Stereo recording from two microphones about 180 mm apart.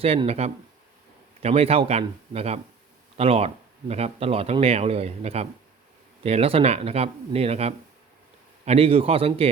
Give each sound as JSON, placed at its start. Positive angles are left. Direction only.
{"t": 0.0, "sound": "speech", "side_deg": -35}